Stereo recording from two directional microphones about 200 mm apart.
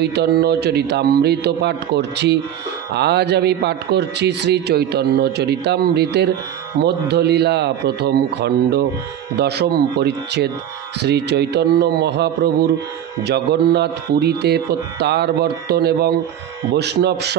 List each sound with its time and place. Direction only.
0.0 s a man's voice: 55° right (ahead or behind)